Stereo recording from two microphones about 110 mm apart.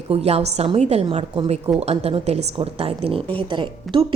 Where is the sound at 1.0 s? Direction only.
50° right (ahead or behind).